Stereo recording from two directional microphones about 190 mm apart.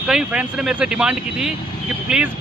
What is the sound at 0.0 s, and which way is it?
Speech, 5° right (ahead or behind).